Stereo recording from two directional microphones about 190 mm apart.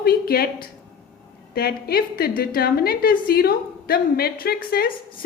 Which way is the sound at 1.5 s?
55° left (ahead or behind).